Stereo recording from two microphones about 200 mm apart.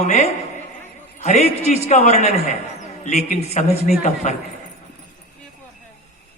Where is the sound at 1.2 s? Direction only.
35° left (ahead or behind).